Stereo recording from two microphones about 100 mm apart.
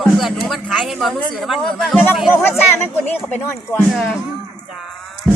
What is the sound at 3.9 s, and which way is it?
Speech, centre (ahead or behind).